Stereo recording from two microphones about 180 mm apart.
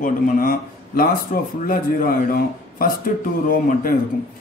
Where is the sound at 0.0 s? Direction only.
55° left (ahead or behind).